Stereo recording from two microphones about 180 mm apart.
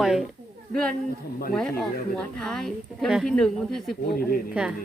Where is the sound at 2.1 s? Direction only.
5° left (ahead or behind).